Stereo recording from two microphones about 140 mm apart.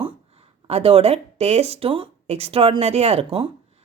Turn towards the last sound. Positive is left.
turn(degrees=-45)  # may be behind; listen again after turning